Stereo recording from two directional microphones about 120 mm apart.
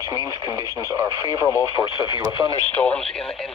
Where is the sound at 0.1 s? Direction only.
25° right (ahead or behind).